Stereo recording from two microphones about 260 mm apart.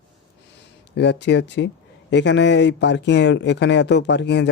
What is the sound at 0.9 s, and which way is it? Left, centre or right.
Speech, left.